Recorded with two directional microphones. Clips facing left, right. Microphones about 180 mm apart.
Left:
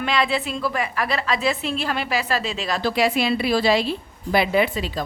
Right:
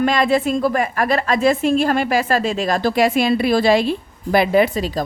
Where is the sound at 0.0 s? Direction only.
45° right (ahead or behind).